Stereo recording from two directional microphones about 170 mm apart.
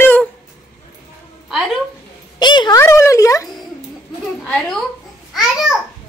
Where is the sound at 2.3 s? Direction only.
25° left (ahead or behind).